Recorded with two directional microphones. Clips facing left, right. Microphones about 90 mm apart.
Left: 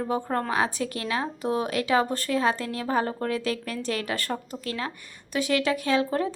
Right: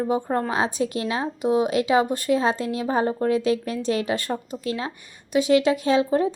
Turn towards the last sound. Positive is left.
turn(degrees=-20)  # may be behind; listen again after turning